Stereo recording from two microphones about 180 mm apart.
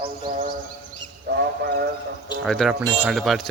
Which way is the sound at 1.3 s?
65° right (ahead or behind).